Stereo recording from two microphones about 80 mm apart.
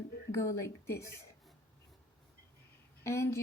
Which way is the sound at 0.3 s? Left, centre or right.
Left.